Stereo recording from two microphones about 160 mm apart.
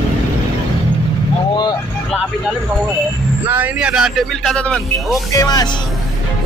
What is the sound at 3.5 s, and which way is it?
Music, 10° right (ahead or behind).